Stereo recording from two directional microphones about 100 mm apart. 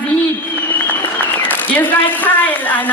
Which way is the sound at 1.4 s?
15° left (ahead or behind).